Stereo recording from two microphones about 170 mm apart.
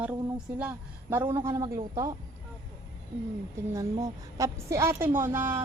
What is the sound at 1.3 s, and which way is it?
Speech, 30° right (ahead or behind).